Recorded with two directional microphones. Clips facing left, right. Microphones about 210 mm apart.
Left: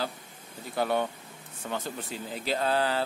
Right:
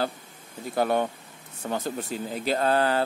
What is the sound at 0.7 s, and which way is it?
Speech, 45° right (ahead or behind).